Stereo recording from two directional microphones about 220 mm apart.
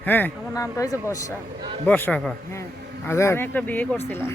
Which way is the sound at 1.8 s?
5° left (ahead or behind).